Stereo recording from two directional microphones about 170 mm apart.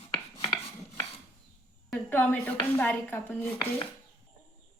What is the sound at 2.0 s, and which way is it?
Speech, 10° left (ahead or behind).